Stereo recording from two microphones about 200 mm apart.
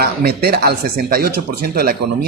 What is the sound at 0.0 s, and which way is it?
Speech, 50° right (ahead or behind).